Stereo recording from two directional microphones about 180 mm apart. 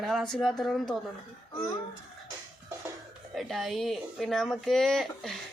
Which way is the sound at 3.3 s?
Centre (ahead or behind).